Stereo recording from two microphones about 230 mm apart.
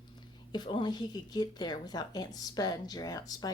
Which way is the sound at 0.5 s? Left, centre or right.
Centre.